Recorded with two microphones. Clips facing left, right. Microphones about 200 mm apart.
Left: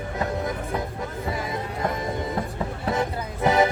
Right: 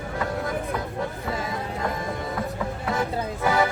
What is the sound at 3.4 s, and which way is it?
Music, 20° left (ahead or behind).